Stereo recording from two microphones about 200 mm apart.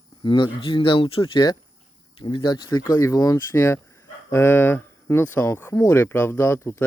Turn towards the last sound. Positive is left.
turn(degrees=10)  # may be behind; listen again after turning